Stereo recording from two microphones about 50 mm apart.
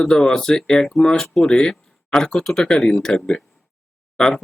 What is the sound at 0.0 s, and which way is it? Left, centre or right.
Speech, centre.